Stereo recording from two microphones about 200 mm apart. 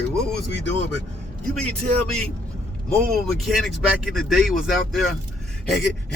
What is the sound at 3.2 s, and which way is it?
Speech, centre (ahead or behind).